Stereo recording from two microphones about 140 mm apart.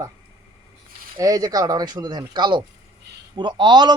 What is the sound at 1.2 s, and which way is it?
A man's voice, 25° right (ahead or behind).